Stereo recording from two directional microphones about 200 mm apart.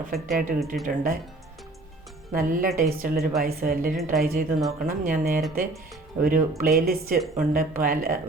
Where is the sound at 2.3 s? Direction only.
45° right (ahead or behind).